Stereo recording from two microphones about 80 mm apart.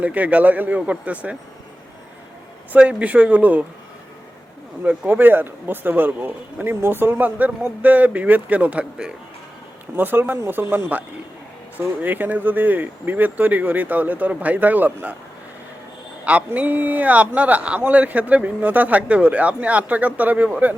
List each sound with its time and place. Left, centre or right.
0.0 s speech: centre
2.7 s speech: centre
4.8 s speech: right
9.9 s speech: right
12.0 s speech: right
16.6 s speech: right